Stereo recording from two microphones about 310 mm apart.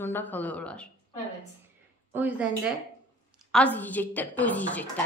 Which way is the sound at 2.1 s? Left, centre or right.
Centre.